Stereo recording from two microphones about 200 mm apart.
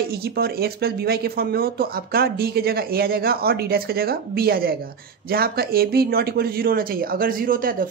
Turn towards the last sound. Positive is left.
turn(degrees=-45)  # may be behind; listen again after turning